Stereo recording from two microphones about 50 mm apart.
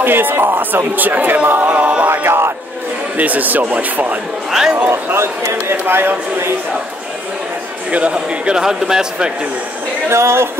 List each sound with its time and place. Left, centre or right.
0.0 s speech: right
0.9 s speech: right
2.0 s speech: right
3.2 s speech: right
4.5 s a man's voice: centre
5.1 s speech: right
7.9 s a man's voice: right
10.0 s speech: right